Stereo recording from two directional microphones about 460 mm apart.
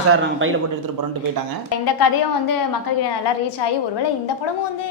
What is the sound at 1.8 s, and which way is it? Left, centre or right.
Speech, left.